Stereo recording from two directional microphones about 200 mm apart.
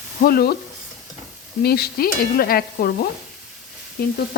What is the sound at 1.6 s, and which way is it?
Stir, 50° left (ahead or behind).